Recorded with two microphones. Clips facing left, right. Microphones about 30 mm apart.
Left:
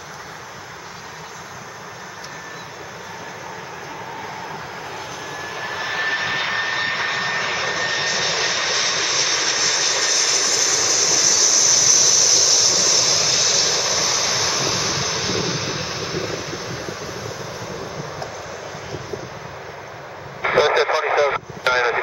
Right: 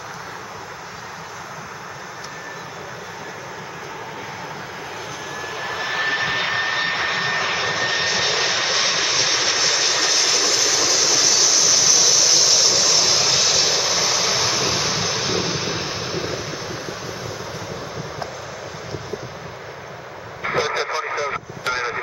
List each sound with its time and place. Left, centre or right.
5.4 s vehicle: centre
20.4 s vehicle: centre